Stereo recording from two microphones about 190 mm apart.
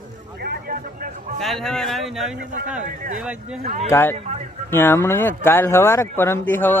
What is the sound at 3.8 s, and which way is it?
Speech, 15° left (ahead or behind).